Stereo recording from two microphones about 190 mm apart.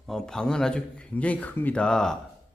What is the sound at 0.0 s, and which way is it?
Speech, centre (ahead or behind).